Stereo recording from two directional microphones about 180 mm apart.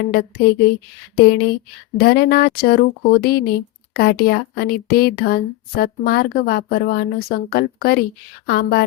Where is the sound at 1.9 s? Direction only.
60° left (ahead or behind).